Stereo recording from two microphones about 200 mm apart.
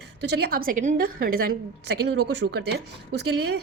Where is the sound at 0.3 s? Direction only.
55° right (ahead or behind).